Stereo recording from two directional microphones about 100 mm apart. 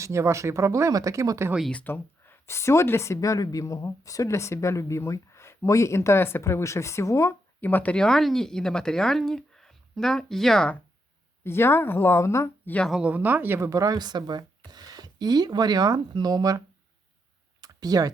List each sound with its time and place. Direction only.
0.0 s speech: 30° right (ahead or behind)
1.7 s speech: 20° left (ahead or behind)
11.4 s speech: 25° left (ahead or behind)
12.9 s speech: 10° right (ahead or behind)
13.6 s speech: 35° right (ahead or behind)
17.6 s a sound: 40° right (ahead or behind)